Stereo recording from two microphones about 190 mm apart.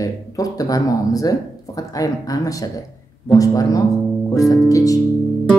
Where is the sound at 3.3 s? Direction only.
20° left (ahead or behind).